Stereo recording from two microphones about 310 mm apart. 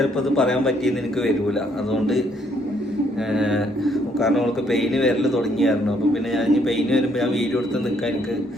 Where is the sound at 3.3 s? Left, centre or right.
Centre.